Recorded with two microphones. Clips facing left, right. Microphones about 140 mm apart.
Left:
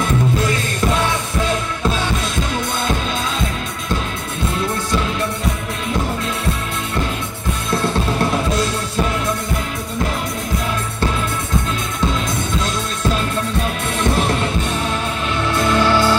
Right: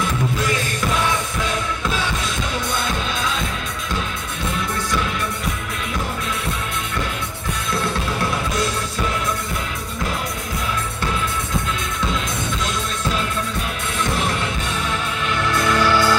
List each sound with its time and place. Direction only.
15.5 s music: 25° left (ahead or behind)